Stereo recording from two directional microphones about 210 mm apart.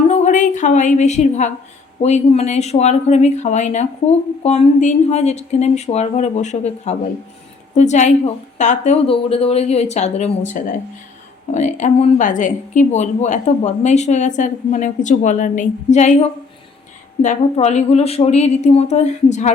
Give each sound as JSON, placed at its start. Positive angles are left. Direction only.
{"t": 0.1, "sound": "a woman's voice", "side_deg": 35}